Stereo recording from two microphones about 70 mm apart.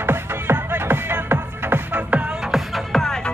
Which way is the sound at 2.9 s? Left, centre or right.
Centre.